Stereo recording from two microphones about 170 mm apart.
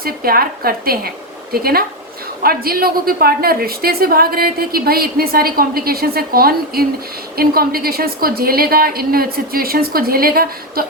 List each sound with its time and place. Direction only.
0.0 s a woman's voice: 60° right (ahead or behind)